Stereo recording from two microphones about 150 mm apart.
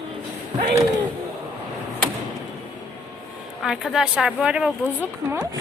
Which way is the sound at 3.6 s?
Centre (ahead or behind).